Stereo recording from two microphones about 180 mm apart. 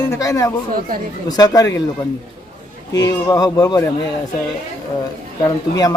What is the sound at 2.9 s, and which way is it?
Speech, 20° left (ahead or behind).